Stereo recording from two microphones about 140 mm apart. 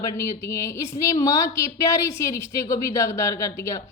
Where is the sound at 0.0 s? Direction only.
20° left (ahead or behind).